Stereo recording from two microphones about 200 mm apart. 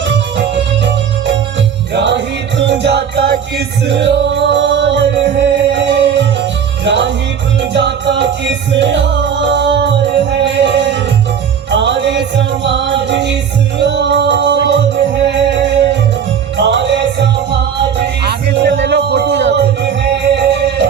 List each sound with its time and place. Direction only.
0.0 s music: 60° right (ahead or behind)
1.9 s music: 60° right (ahead or behind)
18.3 s music: 60° right (ahead or behind)